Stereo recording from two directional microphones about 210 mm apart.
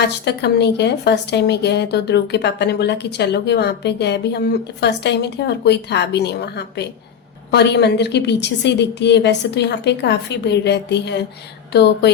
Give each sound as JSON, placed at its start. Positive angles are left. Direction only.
{"t": 0.0, "sound": "speech", "side_deg": 55}